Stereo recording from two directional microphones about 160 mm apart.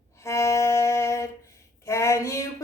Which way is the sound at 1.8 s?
15° left (ahead or behind).